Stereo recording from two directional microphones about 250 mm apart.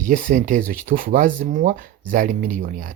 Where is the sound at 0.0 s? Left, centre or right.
Right.